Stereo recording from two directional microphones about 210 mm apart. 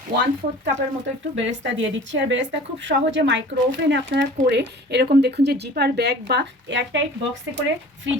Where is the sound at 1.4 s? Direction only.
60° right (ahead or behind).